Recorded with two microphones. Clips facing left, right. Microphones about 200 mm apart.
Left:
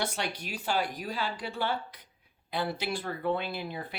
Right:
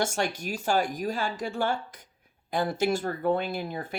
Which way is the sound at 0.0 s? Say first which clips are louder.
Right 5 dB; 45° right (ahead or behind).